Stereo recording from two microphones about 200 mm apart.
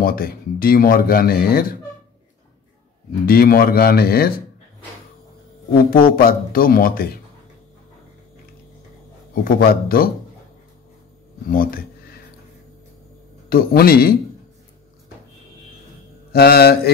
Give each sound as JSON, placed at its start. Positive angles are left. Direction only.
{"t": 0.0, "sound": "speech", "side_deg": 45}
{"t": 3.3, "sound": "speech", "side_deg": 45}
{"t": 5.9, "sound": "speech", "side_deg": 45}
{"t": 9.3, "sound": "speech", "side_deg": 50}
{"t": 11.5, "sound": "a sound", "side_deg": 45}
{"t": 13.5, "sound": "speech", "side_deg": 50}
{"t": 16.3, "sound": "speech", "side_deg": 50}